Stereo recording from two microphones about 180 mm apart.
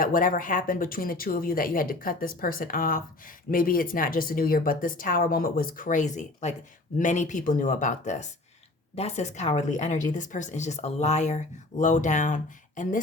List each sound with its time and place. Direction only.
0.0 s speech: 50° left (ahead or behind)